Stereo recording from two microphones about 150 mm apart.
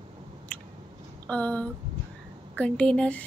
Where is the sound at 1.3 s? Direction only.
10° left (ahead or behind).